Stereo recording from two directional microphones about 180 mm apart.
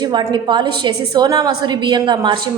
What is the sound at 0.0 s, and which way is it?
A woman's voice, 25° right (ahead or behind).